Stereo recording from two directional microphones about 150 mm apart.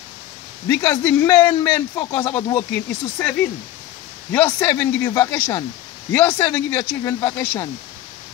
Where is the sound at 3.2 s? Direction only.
15° left (ahead or behind).